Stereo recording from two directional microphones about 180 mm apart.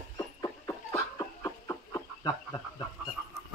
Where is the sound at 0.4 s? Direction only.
15° left (ahead or behind).